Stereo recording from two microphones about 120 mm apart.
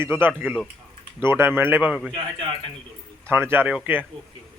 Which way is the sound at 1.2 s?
20° right (ahead or behind).